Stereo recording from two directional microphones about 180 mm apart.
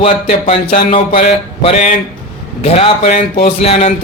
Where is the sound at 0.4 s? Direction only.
30° left (ahead or behind).